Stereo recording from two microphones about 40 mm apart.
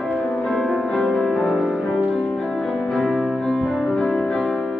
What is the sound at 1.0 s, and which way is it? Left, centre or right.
Music, centre.